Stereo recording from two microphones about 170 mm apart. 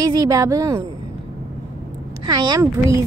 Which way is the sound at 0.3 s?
20° right (ahead or behind).